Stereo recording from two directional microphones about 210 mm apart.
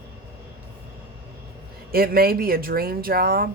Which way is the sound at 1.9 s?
45° right (ahead or behind).